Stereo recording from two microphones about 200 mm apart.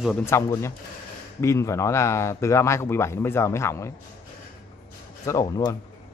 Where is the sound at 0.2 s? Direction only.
15° left (ahead or behind).